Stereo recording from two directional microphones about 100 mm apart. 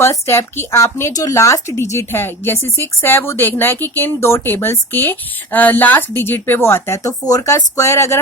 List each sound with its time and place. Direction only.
0.0 s speech: 25° left (ahead or behind)